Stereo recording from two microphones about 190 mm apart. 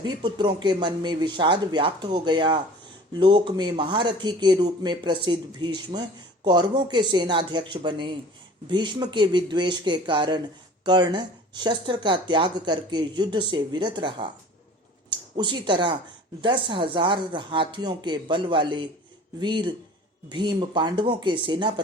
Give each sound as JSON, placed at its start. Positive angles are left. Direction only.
{"t": 0.0, "sound": "speech", "side_deg": -25}